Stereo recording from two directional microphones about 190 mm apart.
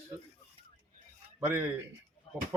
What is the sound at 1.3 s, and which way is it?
Speech, 10° right (ahead or behind).